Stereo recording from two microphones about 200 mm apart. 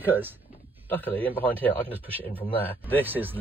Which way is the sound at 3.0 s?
10° right (ahead or behind).